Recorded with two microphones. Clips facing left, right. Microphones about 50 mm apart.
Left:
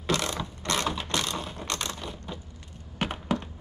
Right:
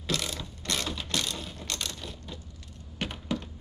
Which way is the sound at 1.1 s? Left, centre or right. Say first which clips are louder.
Left 3 dB; centre.